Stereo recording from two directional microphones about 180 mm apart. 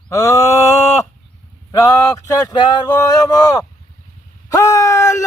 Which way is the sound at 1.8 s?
20° left (ahead or behind).